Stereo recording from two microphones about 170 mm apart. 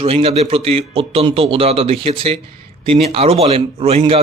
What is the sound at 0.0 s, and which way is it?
A man's voice, 35° right (ahead or behind).